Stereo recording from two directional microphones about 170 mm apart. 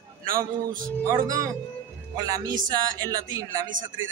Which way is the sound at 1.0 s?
20° right (ahead or behind).